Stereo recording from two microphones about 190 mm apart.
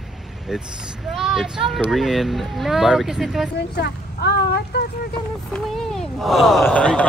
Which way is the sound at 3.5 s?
60° left (ahead or behind).